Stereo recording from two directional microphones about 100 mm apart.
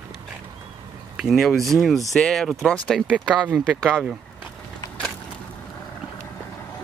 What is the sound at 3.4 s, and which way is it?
Speech, 10° right (ahead or behind).